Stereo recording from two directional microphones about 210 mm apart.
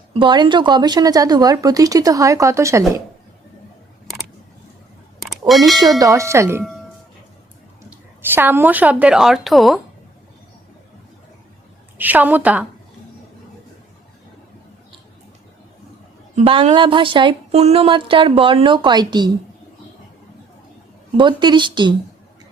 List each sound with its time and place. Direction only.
0.1 s speech: 20° right (ahead or behind)
5.5 s a woman's voice: centre (ahead or behind)
6.0 s speech: 15° right (ahead or behind)
8.4 s a woman's voice: 10° right (ahead or behind)
11.9 s speech: 10° right (ahead or behind)
16.3 s a woman's voice: 25° right (ahead or behind)
21.2 s a woman's voice: 20° right (ahead or behind)